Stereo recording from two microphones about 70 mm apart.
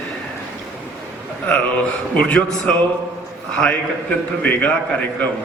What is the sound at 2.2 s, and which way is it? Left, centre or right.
A man's voice, centre.